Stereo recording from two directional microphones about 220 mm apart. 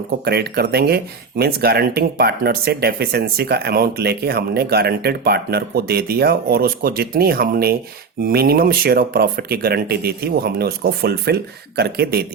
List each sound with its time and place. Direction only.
0.3 s speech: 45° right (ahead or behind)